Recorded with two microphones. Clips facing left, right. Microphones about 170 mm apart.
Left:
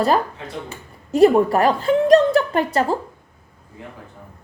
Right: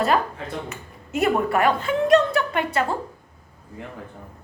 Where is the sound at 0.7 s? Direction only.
35° left (ahead or behind).